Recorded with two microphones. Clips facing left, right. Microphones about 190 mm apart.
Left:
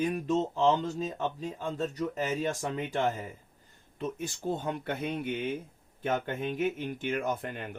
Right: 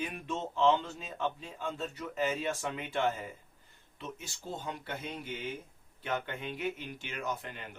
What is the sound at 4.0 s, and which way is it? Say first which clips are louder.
Speech: left 9 dB; 50° left (ahead or behind).